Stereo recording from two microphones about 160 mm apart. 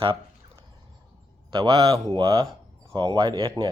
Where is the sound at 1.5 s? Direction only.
25° right (ahead or behind).